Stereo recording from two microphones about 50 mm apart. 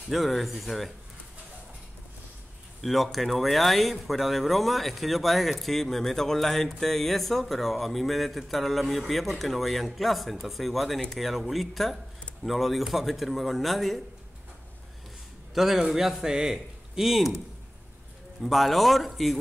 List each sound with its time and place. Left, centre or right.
0.1 s speech: centre
2.8 s speech: centre
15.5 s a man's voice: centre
18.4 s speech: centre